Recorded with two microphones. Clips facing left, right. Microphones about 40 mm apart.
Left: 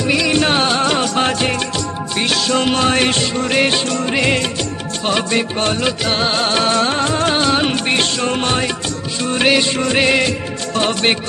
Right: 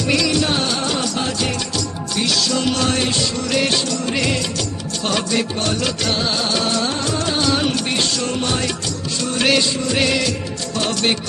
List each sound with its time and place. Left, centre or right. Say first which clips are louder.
0.0 s music: left 2 dB; left
0.3 s music: left 4 dB; left
6.1 s music: left 4 dB; left
9.3 s music: left 3 dB; left